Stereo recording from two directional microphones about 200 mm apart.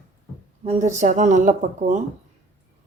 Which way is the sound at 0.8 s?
40° right (ahead or behind).